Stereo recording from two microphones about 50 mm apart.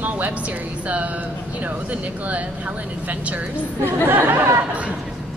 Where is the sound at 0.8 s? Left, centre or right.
Right.